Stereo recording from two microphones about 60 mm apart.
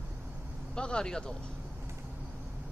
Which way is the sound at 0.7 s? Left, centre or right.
Centre.